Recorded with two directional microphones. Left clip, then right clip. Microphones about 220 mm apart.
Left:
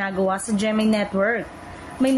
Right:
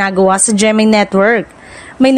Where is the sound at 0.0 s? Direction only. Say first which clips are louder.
Right 12 dB; 45° right (ahead or behind).